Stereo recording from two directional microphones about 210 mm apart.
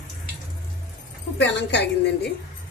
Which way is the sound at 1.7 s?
55° left (ahead or behind).